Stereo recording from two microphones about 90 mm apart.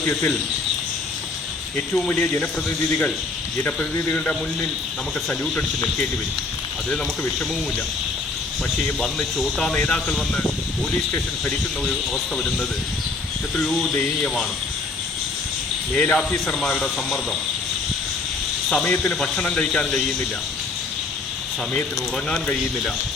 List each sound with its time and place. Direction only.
1.9 s speech: 10° left (ahead or behind)
2.1 s speech: 20° left (ahead or behind)
9.0 s speech: centre (ahead or behind)
12.4 s speech: 10° left (ahead or behind)
16.0 s speech: 15° left (ahead or behind)
18.7 s speech: 5° left (ahead or behind)
22.3 s speech: 10° left (ahead or behind)